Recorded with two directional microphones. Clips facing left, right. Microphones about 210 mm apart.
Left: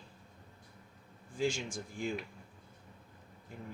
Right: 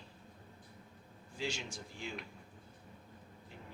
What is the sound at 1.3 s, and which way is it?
Speech, 50° left (ahead or behind).